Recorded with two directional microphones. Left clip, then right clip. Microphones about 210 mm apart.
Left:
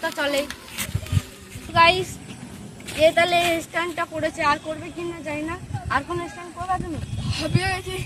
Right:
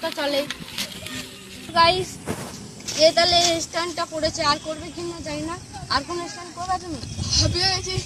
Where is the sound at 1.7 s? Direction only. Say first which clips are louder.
Left 1 dB; 10° right (ahead or behind).